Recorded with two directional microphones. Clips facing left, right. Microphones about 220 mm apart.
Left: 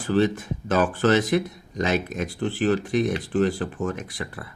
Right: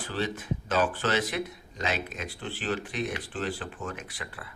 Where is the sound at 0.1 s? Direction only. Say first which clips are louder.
Left 11 dB; 45° left (ahead or behind).